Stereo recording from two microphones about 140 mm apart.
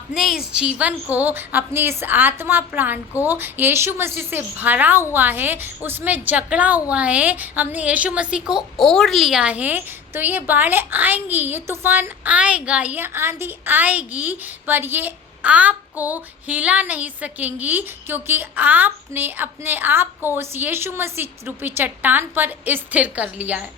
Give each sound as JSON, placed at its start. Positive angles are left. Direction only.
{"t": 0.1, "sound": "a woman's voice", "side_deg": -5}